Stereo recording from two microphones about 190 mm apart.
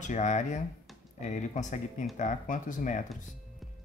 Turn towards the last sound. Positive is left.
turn(degrees=40)  # may be behind; listen again after turning